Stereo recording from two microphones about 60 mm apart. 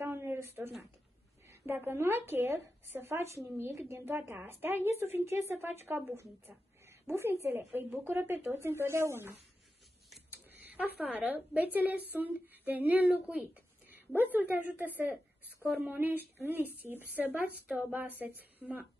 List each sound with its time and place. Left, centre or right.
0.0 s a sound: right
1.7 s speech: right
6.9 s speech: right
10.5 s a woman's voice: right